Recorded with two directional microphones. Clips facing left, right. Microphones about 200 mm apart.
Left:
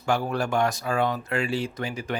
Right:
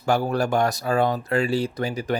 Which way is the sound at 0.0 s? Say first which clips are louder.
Right 4 dB; 40° right (ahead or behind).